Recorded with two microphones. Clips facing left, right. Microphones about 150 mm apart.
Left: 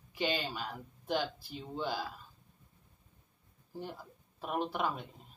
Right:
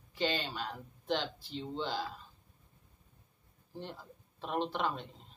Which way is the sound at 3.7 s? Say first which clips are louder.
Left 1 dB; 10° left (ahead or behind).